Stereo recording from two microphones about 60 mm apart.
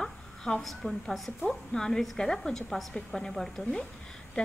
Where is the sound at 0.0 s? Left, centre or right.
Centre.